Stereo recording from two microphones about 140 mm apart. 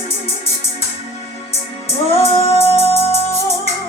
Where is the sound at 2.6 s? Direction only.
20° left (ahead or behind).